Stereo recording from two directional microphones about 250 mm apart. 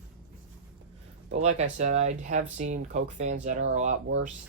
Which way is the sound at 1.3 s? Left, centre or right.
Right.